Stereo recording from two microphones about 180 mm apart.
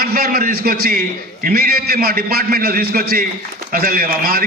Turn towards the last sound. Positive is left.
turn(degrees=-55)  # may be behind; listen again after turning